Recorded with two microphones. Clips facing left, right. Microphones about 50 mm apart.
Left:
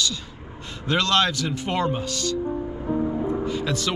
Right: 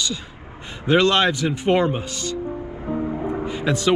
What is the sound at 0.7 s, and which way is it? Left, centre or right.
Speech, centre.